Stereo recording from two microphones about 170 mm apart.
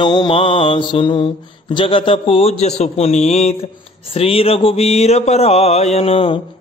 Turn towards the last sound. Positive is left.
turn(degrees=35)  # may be behind; listen again after turning